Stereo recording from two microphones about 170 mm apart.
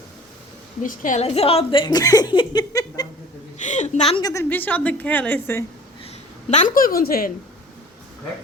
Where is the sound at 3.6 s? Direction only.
45° left (ahead or behind).